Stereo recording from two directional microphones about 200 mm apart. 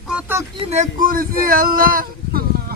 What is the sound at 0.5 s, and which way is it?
Speech, 30° right (ahead or behind).